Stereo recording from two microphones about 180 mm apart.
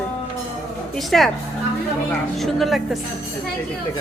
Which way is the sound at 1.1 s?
5° left (ahead or behind).